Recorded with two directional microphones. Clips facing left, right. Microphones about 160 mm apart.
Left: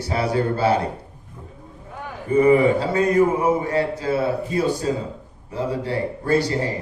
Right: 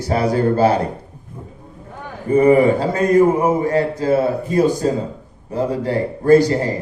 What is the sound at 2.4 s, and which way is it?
A man's voice, 40° right (ahead or behind).